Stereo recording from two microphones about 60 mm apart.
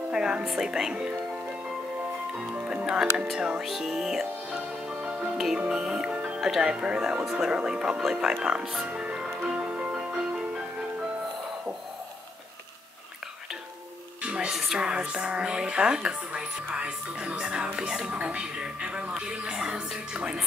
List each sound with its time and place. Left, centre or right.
0.1 s speech: centre
1.1 s music: centre
2.3 s speech: centre
3.6 s speech: centre
4.8 s music: centre
6.3 s speech: centre
8.8 s music: centre
14.2 s music: centre
14.5 s speech: centre